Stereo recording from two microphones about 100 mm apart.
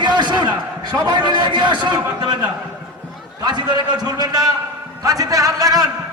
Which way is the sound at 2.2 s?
45° right (ahead or behind).